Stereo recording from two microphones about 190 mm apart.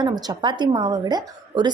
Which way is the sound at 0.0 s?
20° right (ahead or behind).